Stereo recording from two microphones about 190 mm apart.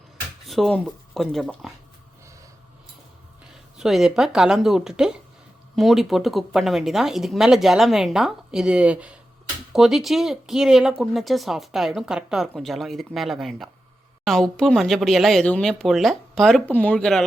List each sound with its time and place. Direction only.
0.4 s speech: centre (ahead or behind)
3.8 s speech: centre (ahead or behind)